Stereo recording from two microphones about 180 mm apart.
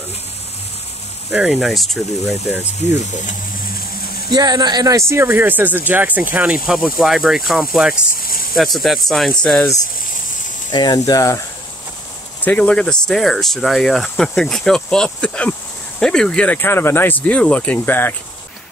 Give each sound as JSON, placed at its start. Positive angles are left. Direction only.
{"t": 1.3, "sound": "speech", "side_deg": -5}
{"t": 4.3, "sound": "speech", "side_deg": -25}
{"t": 8.2, "sound": "snake", "side_deg": 55}
{"t": 8.5, "sound": "speech", "side_deg": 0}
{"t": 10.7, "sound": "speech", "side_deg": 25}
{"t": 12.4, "sound": "speech", "side_deg": 5}